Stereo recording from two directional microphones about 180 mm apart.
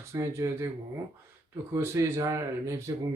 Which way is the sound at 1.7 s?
15° right (ahead or behind).